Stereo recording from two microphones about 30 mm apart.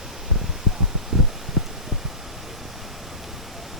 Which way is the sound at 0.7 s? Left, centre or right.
Centre.